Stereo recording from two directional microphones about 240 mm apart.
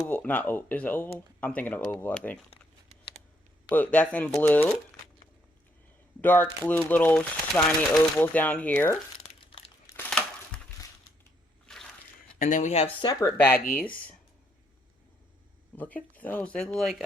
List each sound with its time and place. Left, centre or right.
0.1 s speech: centre
3.7 s speech: centre
6.2 s speech: centre
9.4 s crumpling: left
10.1 s crumpling: centre
11.6 s a sound: centre
12.4 s speech: left; by 13.6 s centre
15.7 s speech: centre